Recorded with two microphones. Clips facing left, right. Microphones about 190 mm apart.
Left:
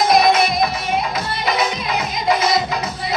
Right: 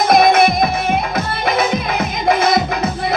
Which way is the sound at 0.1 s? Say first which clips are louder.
Right 6 dB; 55° right (ahead or behind).